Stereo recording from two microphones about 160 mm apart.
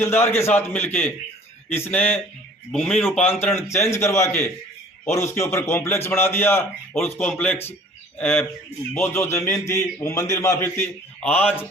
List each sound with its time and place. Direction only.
0.0 s a man's voice: 15° left (ahead or behind)
3.4 s speech: 15° left (ahead or behind)